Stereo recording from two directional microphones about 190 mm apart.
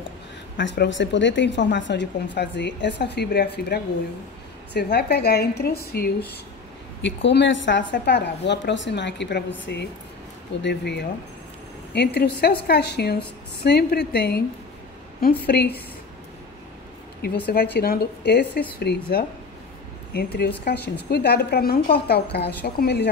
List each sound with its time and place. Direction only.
0.6 s speech: 70° left (ahead or behind)
4.9 s a woman's voice: 60° left (ahead or behind)
7.0 s a woman's voice: 70° left (ahead or behind)
15.4 s a woman's voice: 55° left (ahead or behind)
17.2 s a woman's voice: 55° left (ahead or behind)
20.6 s a woman's voice: 60° left (ahead or behind)